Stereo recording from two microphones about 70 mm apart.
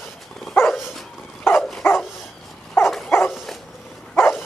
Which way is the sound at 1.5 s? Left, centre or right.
Centre.